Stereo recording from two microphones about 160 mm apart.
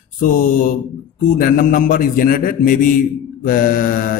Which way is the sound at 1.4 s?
60° left (ahead or behind).